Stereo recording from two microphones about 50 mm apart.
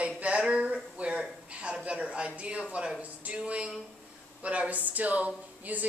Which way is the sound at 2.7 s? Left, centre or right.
Right.